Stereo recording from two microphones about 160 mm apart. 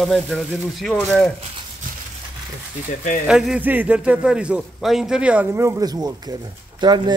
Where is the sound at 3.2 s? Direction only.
5° right (ahead or behind); by 7.1 s 25° right (ahead or behind).